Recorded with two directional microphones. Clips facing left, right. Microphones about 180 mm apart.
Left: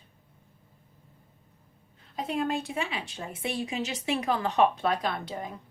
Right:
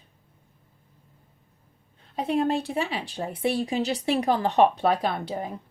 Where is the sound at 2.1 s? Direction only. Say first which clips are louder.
Right 5 dB; 30° right (ahead or behind).